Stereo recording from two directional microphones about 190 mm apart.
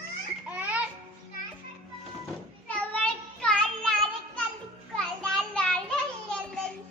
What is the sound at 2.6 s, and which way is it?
Child singing, 5° left (ahead or behind).